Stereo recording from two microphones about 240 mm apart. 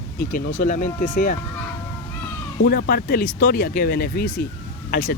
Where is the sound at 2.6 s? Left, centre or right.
Left.